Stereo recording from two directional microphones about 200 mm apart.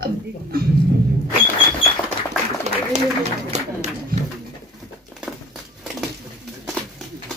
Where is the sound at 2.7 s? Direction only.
35° right (ahead or behind).